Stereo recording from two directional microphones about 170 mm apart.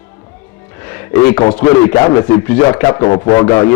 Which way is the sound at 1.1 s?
15° left (ahead or behind).